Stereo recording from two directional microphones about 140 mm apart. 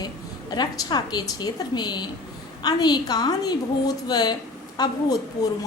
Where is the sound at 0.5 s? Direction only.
30° left (ahead or behind).